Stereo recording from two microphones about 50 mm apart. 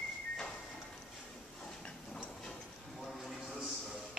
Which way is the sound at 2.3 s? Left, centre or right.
Centre.